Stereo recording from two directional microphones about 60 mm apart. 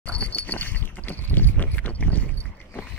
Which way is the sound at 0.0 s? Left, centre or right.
Left.